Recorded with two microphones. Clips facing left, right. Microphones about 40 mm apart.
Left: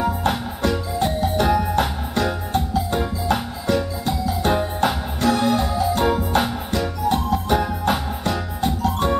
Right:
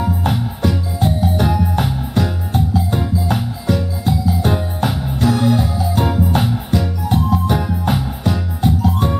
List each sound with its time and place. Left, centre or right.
0.2 s music: centre